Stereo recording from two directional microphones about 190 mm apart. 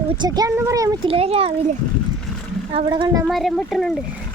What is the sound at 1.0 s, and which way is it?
Speech, 30° right (ahead or behind).